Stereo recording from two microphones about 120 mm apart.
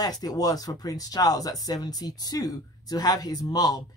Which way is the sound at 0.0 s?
30° left (ahead or behind).